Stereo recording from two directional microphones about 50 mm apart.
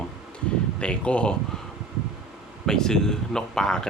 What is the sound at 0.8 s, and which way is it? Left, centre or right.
Speech, left.